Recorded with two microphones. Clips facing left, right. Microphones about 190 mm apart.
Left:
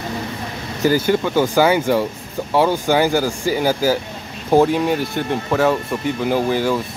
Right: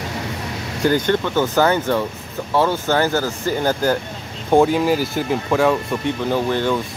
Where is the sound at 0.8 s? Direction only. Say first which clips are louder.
Left 1 dB; 5° left (ahead or behind).